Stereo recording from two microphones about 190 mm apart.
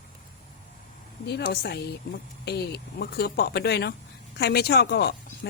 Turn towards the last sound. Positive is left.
turn(degrees=60)  # may be behind; listen again after turning